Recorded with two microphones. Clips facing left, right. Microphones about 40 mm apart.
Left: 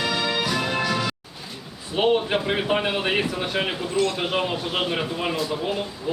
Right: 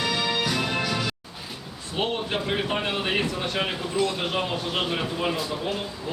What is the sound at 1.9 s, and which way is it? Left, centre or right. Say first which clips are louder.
Speech: left 6 dB; centre.